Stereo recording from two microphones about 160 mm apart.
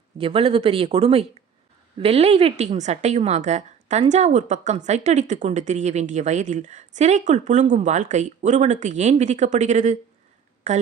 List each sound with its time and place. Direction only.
0.2 s a woman's voice: 35° right (ahead or behind)